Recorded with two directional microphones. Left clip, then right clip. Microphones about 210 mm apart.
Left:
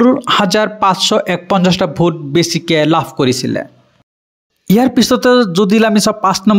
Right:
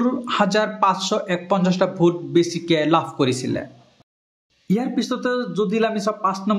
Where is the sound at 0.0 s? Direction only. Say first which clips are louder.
Left 10 dB; 40° left (ahead or behind).